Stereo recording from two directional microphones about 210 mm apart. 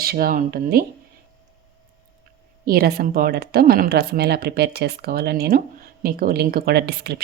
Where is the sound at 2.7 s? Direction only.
45° right (ahead or behind).